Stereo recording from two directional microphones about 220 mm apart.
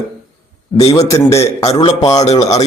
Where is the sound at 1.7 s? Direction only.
25° left (ahead or behind).